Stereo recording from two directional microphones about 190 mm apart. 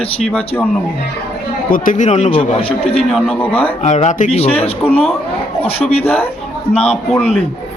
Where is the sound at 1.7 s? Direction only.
45° left (ahead or behind).